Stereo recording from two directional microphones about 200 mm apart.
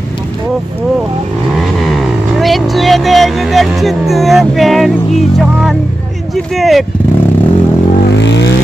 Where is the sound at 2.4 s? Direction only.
Centre (ahead or behind).